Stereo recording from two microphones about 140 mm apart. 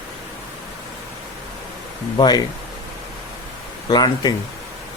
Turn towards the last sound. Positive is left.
turn(degrees=30)  # may be behind; listen again after turning